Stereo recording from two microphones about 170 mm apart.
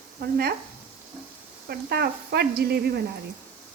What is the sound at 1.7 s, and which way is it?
Speech, 65° right (ahead or behind).